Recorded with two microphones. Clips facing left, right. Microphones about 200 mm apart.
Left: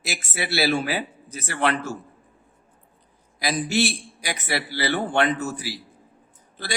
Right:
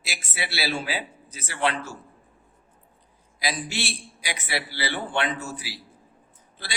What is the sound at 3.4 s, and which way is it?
A man's voice, 45° left (ahead or behind).